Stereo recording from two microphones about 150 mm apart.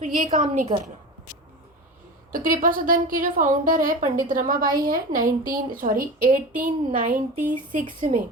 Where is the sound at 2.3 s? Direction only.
65° right (ahead or behind).